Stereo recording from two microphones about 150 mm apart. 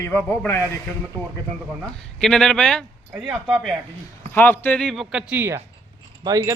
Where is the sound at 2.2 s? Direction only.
5° left (ahead or behind).